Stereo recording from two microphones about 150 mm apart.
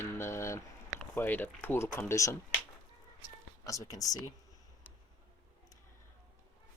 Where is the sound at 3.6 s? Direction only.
20° left (ahead or behind).